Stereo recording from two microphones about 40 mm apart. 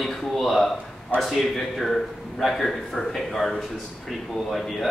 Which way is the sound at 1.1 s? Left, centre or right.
Right.